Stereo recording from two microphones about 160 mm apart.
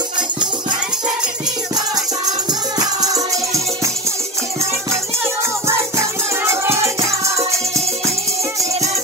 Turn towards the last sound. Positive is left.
turn(degrees=-20)  # may be behind; listen again after turning